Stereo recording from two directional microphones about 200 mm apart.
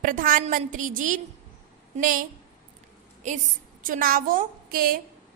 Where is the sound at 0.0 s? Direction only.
45° right (ahead or behind).